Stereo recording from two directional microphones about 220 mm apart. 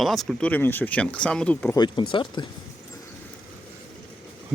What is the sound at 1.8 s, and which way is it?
Speech, 20° left (ahead or behind).